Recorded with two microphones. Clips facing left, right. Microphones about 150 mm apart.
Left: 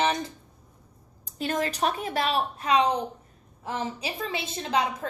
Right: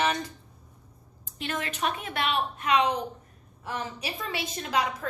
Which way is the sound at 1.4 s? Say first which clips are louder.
Left 4 dB; 40° left (ahead or behind).